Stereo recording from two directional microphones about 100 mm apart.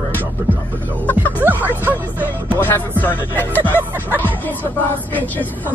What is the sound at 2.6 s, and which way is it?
Speech, 20° left (ahead or behind).